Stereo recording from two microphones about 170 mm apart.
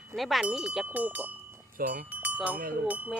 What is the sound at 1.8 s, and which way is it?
Speech, 60° right (ahead or behind).